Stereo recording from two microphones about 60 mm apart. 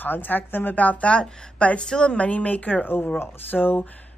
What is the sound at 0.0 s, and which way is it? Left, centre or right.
Speech, left.